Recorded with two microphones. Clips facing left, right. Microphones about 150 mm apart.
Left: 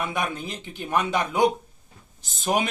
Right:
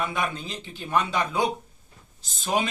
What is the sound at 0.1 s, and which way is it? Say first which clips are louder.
A man's voice: left 1 dB; 15° left (ahead or behind).